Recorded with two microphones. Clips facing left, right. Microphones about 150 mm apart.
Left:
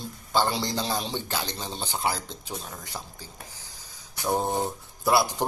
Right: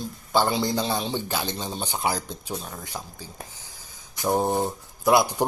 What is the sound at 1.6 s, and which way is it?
Speech, centre (ahead or behind).